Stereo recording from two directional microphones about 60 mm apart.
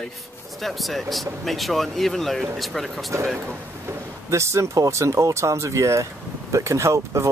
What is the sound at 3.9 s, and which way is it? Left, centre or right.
Speech, right.